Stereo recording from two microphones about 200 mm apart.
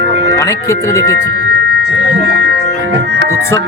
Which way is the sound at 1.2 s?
60° right (ahead or behind).